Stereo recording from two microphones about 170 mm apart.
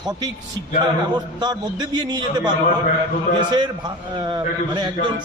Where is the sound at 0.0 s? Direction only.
25° right (ahead or behind).